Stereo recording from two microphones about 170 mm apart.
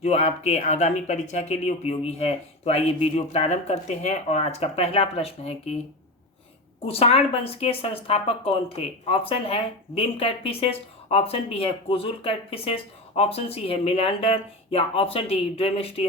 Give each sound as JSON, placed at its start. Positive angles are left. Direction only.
{"t": 0.0, "sound": "speech", "side_deg": 40}
{"t": 6.8, "sound": "speech", "side_deg": 35}